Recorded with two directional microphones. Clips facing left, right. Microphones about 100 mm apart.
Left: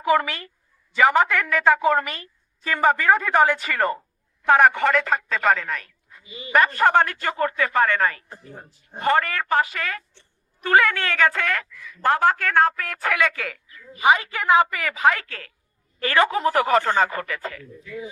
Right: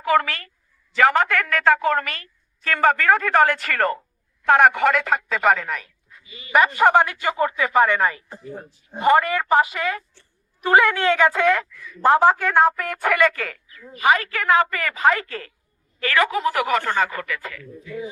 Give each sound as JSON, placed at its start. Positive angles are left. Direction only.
{"t": 0.1, "sound": "speech", "side_deg": 10}
{"t": 0.9, "sound": "a woman's voice", "side_deg": 0}
{"t": 6.2, "sound": "a man's voice", "side_deg": 25}
{"t": 6.5, "sound": "a woman's voice", "side_deg": -10}
{"t": 14.0, "sound": "speech", "side_deg": 20}
{"t": 14.8, "sound": "a woman's voice", "side_deg": 5}
{"t": 16.0, "sound": "speech", "side_deg": 25}